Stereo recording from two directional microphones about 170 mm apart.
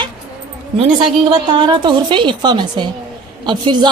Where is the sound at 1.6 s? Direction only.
25° right (ahead or behind).